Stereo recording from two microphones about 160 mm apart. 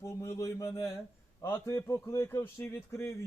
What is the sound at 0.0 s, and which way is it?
A man's voice, 20° left (ahead or behind).